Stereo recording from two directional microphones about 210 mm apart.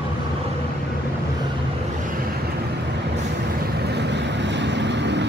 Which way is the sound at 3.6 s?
50° right (ahead or behind).